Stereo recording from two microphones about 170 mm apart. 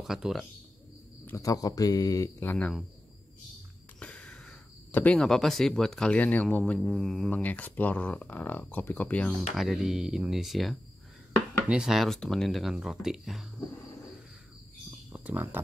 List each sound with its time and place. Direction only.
0.0 s speech: centre (ahead or behind)
1.2 s speech: 15° left (ahead or behind)
2.5 s speech: 5° left (ahead or behind)
4.0 s speech: 5° left (ahead or behind)
15.1 s speech: 10° right (ahead or behind)